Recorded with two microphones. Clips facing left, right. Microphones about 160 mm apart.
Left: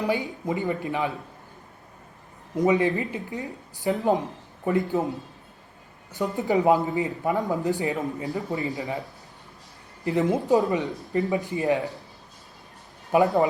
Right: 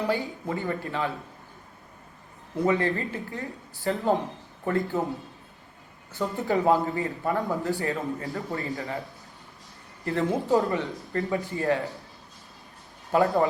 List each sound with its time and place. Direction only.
0.0 s speech: 15° left (ahead or behind)
2.6 s speech: 15° left (ahead or behind)
6.1 s speech: 20° left (ahead or behind)
13.1 s speech: 15° left (ahead or behind)